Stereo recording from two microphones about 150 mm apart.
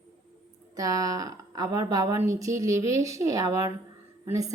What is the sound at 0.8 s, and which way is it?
A woman's voice, 25° right (ahead or behind).